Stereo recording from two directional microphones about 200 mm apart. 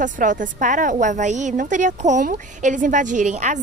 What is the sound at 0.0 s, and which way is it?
A woman's voice, 40° right (ahead or behind).